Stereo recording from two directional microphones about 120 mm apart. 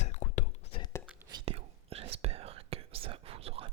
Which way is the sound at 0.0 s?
75° left (ahead or behind).